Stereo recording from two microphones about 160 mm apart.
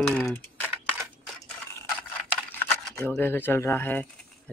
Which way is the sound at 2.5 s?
10° left (ahead or behind).